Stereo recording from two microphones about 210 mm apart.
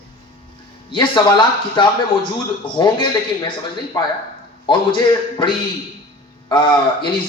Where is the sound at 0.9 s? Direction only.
20° left (ahead or behind).